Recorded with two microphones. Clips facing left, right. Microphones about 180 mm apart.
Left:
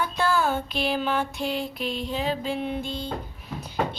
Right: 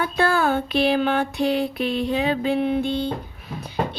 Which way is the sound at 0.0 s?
60° right (ahead or behind).